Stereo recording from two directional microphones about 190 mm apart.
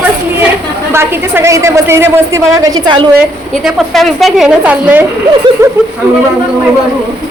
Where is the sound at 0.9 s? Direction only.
10° right (ahead or behind).